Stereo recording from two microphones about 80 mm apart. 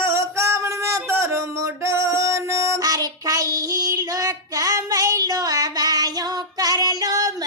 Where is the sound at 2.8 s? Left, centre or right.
Right.